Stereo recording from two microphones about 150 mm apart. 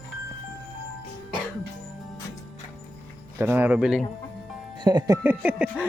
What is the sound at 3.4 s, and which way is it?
Speech, 15° right (ahead or behind).